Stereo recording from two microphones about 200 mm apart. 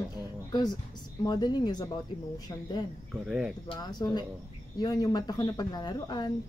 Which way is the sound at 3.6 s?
20° left (ahead or behind).